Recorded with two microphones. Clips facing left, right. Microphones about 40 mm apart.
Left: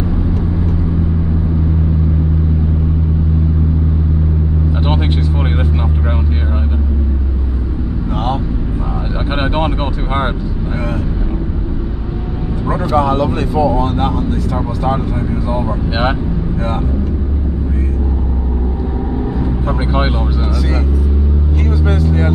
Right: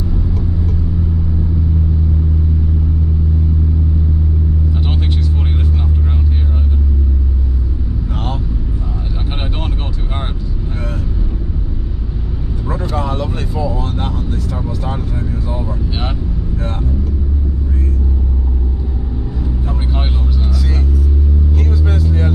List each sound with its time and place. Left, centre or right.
4.7 s vehicle: left
9.3 s vehicle: left
12.6 s vehicle: centre
15.6 s vehicle: left
19.4 s vehicle: left